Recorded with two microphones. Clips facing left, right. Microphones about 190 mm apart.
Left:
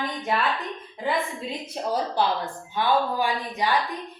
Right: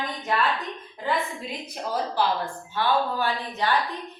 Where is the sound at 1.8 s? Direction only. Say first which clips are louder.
Left 1 dB; 25° left (ahead or behind).